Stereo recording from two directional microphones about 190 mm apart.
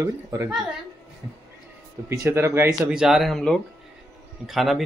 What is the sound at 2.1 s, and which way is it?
Speech, 15° right (ahead or behind).